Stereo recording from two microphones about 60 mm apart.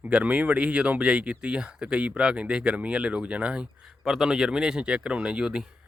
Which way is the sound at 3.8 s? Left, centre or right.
Centre.